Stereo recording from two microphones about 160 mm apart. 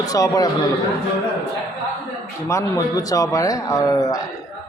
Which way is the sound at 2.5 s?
20° left (ahead or behind).